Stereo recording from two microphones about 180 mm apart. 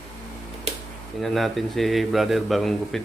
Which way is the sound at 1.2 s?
Centre (ahead or behind).